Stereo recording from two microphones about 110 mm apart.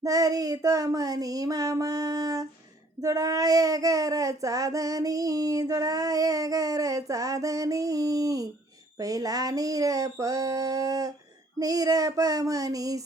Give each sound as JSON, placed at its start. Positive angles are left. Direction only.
{"t": 0.0, "sound": "child singing", "side_deg": -35}